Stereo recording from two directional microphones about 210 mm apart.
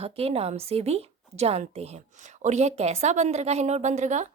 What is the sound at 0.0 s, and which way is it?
A woman's voice, 30° right (ahead or behind).